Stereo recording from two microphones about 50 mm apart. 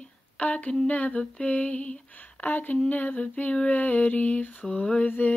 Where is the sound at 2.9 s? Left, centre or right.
Left.